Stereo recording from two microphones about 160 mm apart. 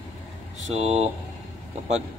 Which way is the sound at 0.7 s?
40° right (ahead or behind).